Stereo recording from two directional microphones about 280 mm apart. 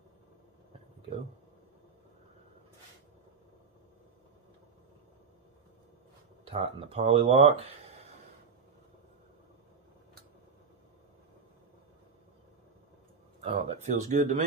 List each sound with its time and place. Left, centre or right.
6.4 s speech: right
13.4 s speech: right